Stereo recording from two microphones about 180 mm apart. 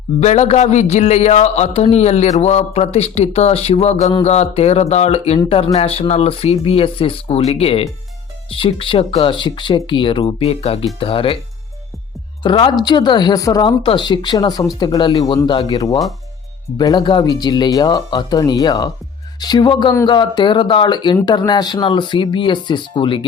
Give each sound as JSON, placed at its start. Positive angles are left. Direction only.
{"t": 0.2, "sound": "a man's voice", "side_deg": 40}
{"t": 12.4, "sound": "speech", "side_deg": 25}